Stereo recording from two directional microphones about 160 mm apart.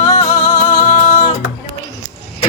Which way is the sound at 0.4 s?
20° left (ahead or behind).